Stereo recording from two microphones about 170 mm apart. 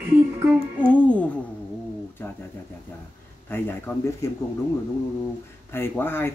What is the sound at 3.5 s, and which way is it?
Speech, 15° left (ahead or behind).